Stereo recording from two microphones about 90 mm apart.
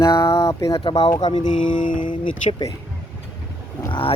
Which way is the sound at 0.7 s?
85° left.